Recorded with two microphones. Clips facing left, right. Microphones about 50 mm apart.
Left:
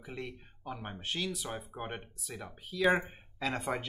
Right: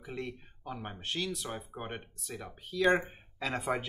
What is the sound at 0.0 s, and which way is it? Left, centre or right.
Speech, centre.